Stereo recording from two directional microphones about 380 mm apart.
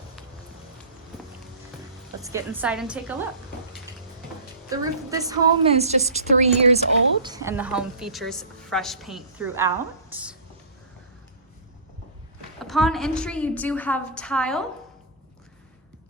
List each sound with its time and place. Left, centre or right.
2.2 s a woman's voice: centre
4.7 s a woman's voice: centre
12.5 s a woman's voice: centre